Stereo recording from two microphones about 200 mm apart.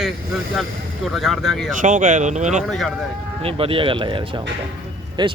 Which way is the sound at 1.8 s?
40° right (ahead or behind).